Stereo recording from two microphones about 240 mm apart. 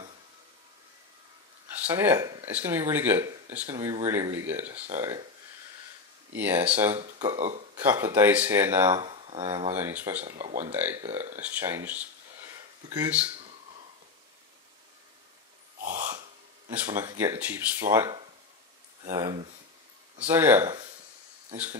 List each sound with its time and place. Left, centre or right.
1.9 s speech: centre
6.3 s speech: centre
7.0 s speech: right
7.7 s speech: centre
9.0 s speech: right
9.8 s speech: centre
10.7 s speech: centre
11.4 s a sound: centre; by 13.6 s right
15.8 s a sound: right
16.7 s speech: centre